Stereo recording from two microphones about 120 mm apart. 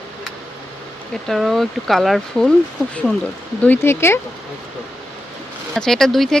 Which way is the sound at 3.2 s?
15° left (ahead or behind).